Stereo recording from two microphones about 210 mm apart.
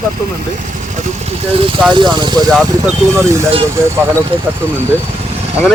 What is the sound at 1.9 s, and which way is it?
Speech, 20° right (ahead or behind).